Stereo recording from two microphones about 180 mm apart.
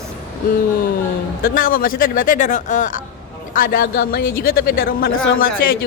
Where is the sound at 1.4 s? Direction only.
55° left (ahead or behind).